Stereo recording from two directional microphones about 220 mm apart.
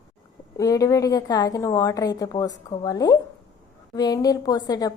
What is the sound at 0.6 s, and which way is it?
A woman's voice, 15° left (ahead or behind).